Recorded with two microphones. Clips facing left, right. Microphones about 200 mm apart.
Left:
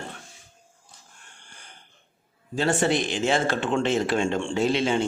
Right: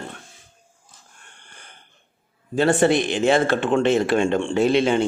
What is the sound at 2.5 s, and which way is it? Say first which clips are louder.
Speech: right 6 dB; 60° right (ahead or behind).